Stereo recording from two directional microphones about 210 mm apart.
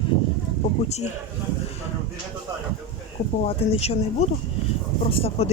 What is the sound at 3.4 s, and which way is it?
Speech, 30° left (ahead or behind).